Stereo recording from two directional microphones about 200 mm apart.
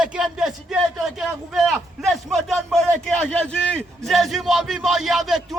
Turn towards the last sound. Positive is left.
turn(degrees=0)  # may be behind; listen again after turning